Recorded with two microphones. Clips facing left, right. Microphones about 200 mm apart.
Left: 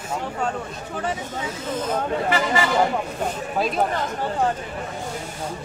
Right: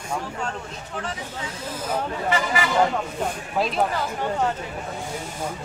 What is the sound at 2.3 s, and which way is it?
Speech, 35° left (ahead or behind).